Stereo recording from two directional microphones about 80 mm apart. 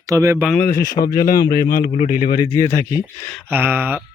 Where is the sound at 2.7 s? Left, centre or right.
Left.